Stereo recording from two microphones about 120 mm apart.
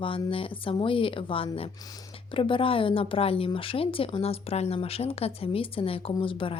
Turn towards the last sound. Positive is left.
turn(degrees=45)  # may be behind; listen again after turning